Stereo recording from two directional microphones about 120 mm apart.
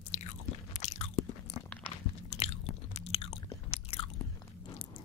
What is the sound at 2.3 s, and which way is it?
Chewing, 60° left (ahead or behind).